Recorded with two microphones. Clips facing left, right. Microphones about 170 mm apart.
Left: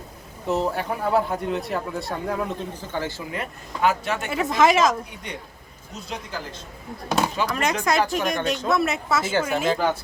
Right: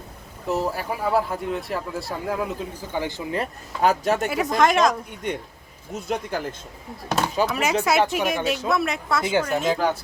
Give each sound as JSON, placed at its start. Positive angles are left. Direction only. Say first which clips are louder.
{"t": 0.4, "sound": "speech", "louder": "left 1 dB", "side_deg": 0}
{"t": 3.3, "sound": "speech", "louder": "right 4 dB", "side_deg": -40}
{"t": 4.3, "sound": "speech", "louder": "left 4 dB", "side_deg": 0}
{"t": 5.2, "sound": "a man's voice", "louder": "right 7 dB", "side_deg": -45}
{"t": 7.4, "sound": "speech", "louder": "right 1 dB", "side_deg": -5}